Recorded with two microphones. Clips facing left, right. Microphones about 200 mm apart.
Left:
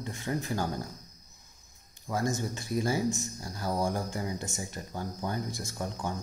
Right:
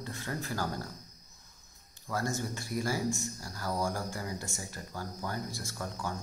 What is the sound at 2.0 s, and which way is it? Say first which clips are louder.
Speech: left 3 dB; 15° left (ahead or behind).